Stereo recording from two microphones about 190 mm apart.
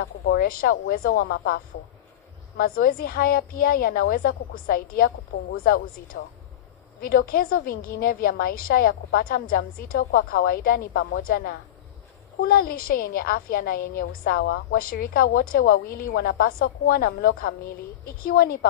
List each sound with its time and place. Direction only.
0.0 s a woman's voice: 50° left (ahead or behind)